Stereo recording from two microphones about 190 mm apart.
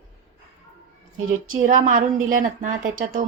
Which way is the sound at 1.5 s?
40° right (ahead or behind).